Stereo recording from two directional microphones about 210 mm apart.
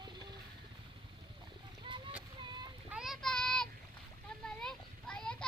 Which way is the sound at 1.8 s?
25° right (ahead or behind).